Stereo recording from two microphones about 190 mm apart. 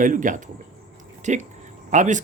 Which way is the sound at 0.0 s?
45° right (ahead or behind).